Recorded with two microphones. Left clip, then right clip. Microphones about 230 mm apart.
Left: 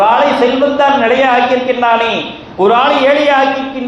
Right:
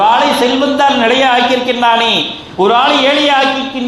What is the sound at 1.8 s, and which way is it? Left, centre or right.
A man's voice, right.